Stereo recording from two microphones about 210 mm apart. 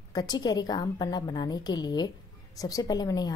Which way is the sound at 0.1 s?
20° left (ahead or behind).